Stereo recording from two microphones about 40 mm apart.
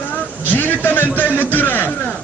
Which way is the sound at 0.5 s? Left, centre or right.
Left.